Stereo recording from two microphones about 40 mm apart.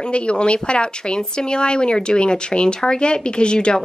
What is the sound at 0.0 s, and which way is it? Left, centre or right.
Speech, left.